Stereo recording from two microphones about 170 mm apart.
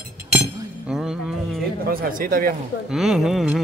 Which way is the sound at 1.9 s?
55° right (ahead or behind).